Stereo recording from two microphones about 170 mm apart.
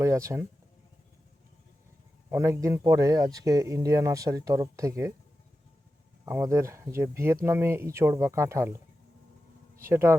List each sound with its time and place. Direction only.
0.0 s speech: 15° right (ahead or behind)
2.3 s speech: 15° right (ahead or behind)
6.2 s speech: 15° right (ahead or behind)
9.9 s speech: 15° right (ahead or behind)